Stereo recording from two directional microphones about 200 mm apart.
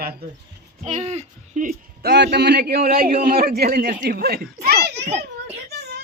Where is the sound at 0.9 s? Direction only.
35° right (ahead or behind); by 5.0 s 55° right (ahead or behind).